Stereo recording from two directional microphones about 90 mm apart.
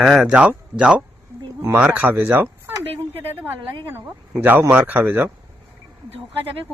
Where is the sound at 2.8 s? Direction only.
90° right.